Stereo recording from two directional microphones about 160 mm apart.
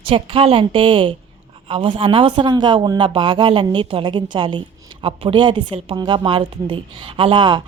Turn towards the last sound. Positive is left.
turn(degrees=-30)  # may be behind; listen again after turning